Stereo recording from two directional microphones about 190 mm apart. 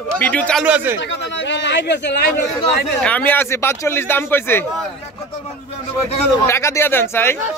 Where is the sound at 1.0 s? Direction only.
70° left (ahead or behind).